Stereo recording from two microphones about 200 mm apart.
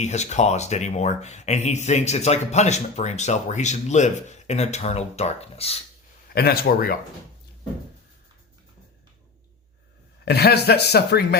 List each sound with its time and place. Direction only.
0.0 s speech: 35° left (ahead or behind)
6.2 s speech: 50° left (ahead or behind)
10.2 s a man's voice: 55° left (ahead or behind)